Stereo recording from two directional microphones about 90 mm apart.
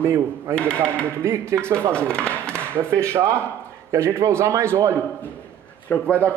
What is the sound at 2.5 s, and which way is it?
A man's voice, 25° right (ahead or behind).